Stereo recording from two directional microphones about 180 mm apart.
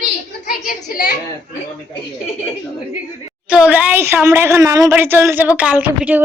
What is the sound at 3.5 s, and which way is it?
A woman's voice, 5° right (ahead or behind).